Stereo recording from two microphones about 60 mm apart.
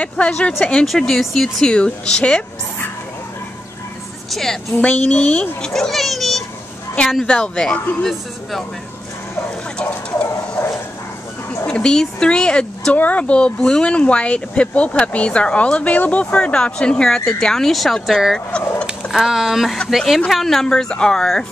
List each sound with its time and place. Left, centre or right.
0.0 s speech: left
4.3 s a child's voice: centre
4.7 s speech: left
5.6 s a child's voice: centre
9.8 s bird: left
11.6 s speech: centre
12.9 s speech: left; by 18.2 s centre
19.0 s a child's voice: centre